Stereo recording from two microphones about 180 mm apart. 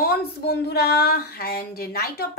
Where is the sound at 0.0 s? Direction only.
60° left (ahead or behind).